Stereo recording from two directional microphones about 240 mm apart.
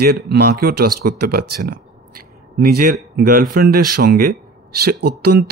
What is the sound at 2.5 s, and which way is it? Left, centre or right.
Speech, right.